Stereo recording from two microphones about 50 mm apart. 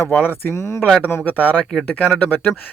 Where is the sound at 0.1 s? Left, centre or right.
Left.